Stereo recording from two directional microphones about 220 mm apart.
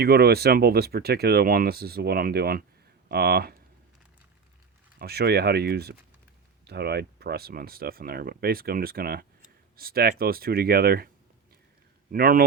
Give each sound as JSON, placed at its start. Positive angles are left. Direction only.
{"t": 0.0, "sound": "speech", "side_deg": -45}
{"t": 4.9, "sound": "speech", "side_deg": -45}
{"t": 12.1, "sound": "speech", "side_deg": -40}